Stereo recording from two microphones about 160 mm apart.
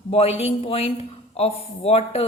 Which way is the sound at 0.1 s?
40° left (ahead or behind).